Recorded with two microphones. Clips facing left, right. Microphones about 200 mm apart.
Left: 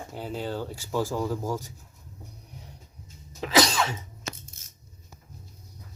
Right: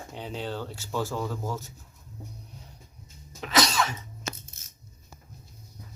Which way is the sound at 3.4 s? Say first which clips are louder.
Left 3 dB; 30° left (ahead or behind).